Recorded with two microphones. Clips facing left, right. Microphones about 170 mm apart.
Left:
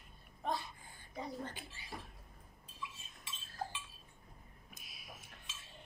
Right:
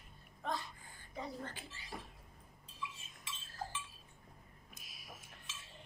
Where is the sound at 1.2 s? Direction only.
15° left (ahead or behind).